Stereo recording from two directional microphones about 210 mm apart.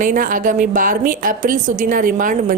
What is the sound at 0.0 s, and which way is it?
A woman's voice, 40° right (ahead or behind).